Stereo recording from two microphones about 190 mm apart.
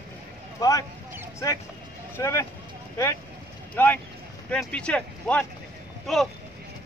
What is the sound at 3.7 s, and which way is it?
Speech, 10° left (ahead or behind).